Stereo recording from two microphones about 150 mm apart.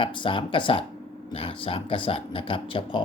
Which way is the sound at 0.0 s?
35° left (ahead or behind).